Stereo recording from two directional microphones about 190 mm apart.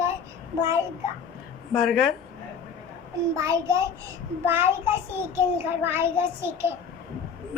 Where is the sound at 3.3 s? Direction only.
15° right (ahead or behind).